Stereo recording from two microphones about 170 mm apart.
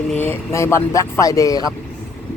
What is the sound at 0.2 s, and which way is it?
Speech, 15° left (ahead or behind).